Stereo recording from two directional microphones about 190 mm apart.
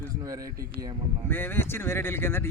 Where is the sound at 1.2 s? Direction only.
10° left (ahead or behind).